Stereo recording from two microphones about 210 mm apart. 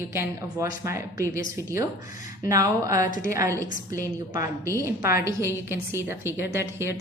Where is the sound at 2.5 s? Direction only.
15° right (ahead or behind).